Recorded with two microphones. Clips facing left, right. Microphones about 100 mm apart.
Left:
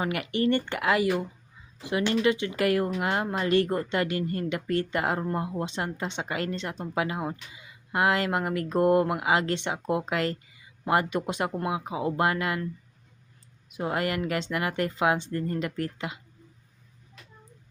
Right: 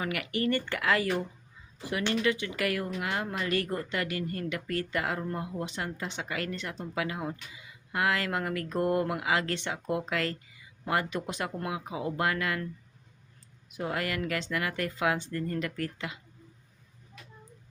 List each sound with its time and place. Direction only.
0.0 s speech: 25° left (ahead or behind)
13.7 s speech: 25° left (ahead or behind)